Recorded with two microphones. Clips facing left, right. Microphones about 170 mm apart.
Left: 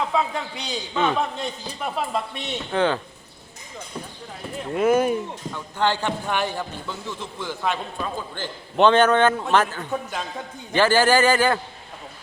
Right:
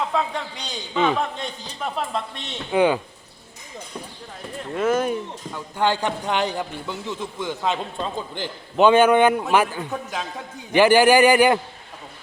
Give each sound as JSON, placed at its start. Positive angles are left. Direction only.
{"t": 0.1, "sound": "a man's voice", "side_deg": 5}
{"t": 0.9, "sound": "a man's voice", "side_deg": -10}
{"t": 1.4, "sound": "a man's voice", "side_deg": 5}
{"t": 2.7, "sound": "a man's voice", "side_deg": -10}
{"t": 4.7, "sound": "speech", "side_deg": 10}
{"t": 5.5, "sound": "a man's voice", "side_deg": -15}
{"t": 8.8, "sound": "a man's voice", "side_deg": -10}
{"t": 10.7, "sound": "a man's voice", "side_deg": -15}